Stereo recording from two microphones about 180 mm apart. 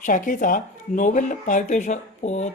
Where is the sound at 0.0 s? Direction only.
45° left (ahead or behind).